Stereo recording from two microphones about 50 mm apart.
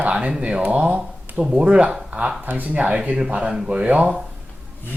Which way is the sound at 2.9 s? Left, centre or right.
Centre.